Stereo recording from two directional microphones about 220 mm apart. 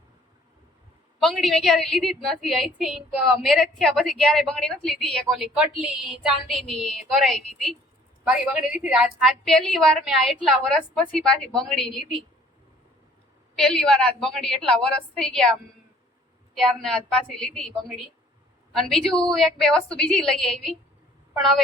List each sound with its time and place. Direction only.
1.2 s a woman's voice: centre (ahead or behind)
13.6 s a woman's voice: 5° left (ahead or behind)
16.6 s a woman's voice: centre (ahead or behind)